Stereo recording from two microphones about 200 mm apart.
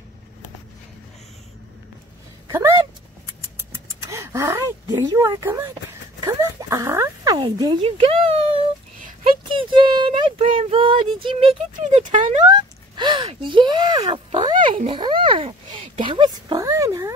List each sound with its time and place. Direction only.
2.4 s speech: 15° right (ahead or behind)
4.1 s speech: 15° right (ahead or behind); by 8.4 s 30° right (ahead or behind)
9.5 s speech: 25° right (ahead or behind)
12.4 s speech: 20° right (ahead or behind)